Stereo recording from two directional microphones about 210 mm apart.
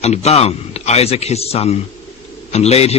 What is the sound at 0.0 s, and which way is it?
A man's voice, 30° left (ahead or behind).